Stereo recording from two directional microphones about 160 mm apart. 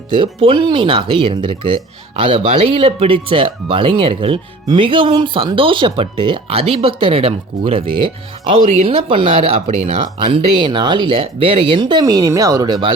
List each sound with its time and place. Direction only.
0.1 s speech: 30° right (ahead or behind)